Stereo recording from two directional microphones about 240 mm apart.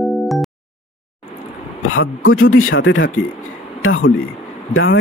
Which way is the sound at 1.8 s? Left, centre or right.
Left.